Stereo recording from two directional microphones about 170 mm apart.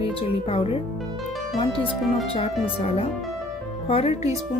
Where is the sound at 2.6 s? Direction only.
35° left (ahead or behind).